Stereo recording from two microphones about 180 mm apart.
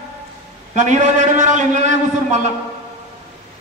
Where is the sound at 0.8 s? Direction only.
40° right (ahead or behind).